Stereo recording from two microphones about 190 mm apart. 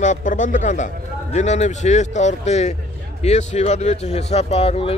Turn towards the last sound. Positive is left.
turn(degrees=30)  # may be behind; listen again after turning